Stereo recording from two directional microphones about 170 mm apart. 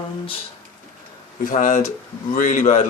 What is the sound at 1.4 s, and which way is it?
A man's voice, 55° left (ahead or behind).